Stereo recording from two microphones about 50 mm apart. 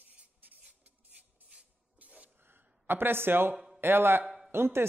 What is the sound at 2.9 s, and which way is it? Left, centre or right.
Speech, right.